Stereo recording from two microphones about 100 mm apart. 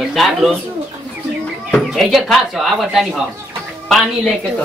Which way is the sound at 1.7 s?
Centre (ahead or behind).